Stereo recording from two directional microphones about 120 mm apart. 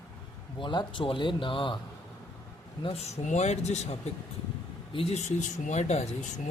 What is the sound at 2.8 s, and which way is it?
A man's voice, 60° left (ahead or behind).